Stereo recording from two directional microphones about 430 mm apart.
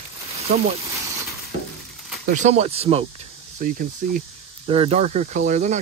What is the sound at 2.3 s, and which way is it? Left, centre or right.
Speech, centre.